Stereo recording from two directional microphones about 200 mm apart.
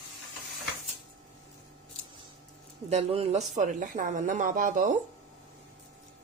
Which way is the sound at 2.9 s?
30° right (ahead or behind).